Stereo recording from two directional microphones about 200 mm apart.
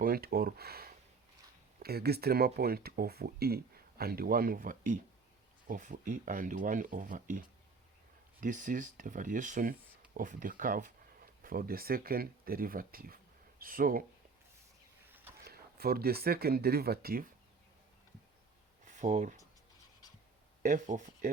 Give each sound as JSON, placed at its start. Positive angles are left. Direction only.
{"t": 0.0, "sound": "speech", "side_deg": -50}
{"t": 15.0, "sound": "a sound", "side_deg": -10}
{"t": 15.4, "sound": "speech", "side_deg": -50}
{"t": 18.9, "sound": "speech", "side_deg": -40}
{"t": 20.6, "sound": "speech", "side_deg": -40}